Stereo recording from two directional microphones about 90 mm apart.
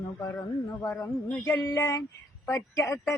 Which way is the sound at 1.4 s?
40° left (ahead or behind).